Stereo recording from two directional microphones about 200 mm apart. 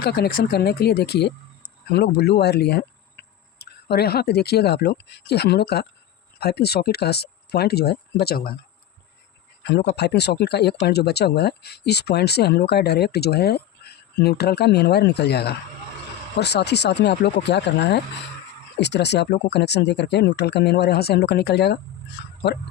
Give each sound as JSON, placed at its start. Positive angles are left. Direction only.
{"t": 0.0, "sound": "speech", "side_deg": 55}
{"t": 9.9, "sound": "speech", "side_deg": 55}